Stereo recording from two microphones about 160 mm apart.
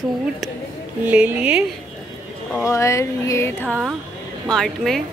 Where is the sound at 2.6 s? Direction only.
20° left (ahead or behind).